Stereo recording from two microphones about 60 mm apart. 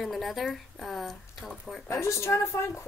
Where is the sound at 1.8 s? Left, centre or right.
Left.